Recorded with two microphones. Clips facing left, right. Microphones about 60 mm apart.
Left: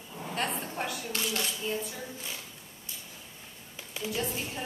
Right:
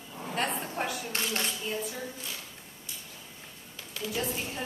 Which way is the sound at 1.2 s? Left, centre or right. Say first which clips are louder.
Even; right.